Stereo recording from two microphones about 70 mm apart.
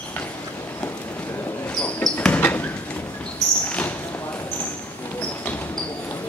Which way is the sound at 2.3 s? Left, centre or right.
Left.